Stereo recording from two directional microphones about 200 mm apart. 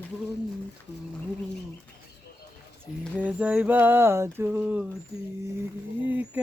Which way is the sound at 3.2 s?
5° right (ahead or behind).